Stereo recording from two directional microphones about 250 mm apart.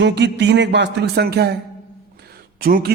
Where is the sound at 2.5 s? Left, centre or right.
Right.